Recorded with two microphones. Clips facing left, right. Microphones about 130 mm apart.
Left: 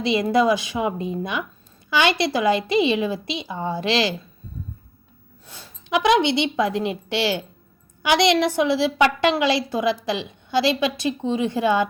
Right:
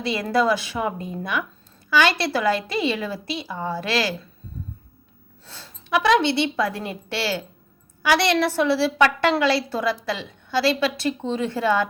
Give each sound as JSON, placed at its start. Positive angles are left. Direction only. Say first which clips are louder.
{"t": 0.0, "sound": "a woman's voice", "louder": "left 3 dB", "side_deg": 20}
{"t": 5.5, "sound": "a woman's voice", "louder": "even", "side_deg": 15}